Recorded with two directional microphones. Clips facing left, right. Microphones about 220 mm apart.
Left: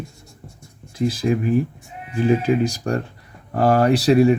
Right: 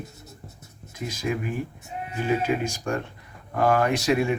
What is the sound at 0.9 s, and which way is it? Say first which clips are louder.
Speech: left 9 dB; 35° left (ahead or behind).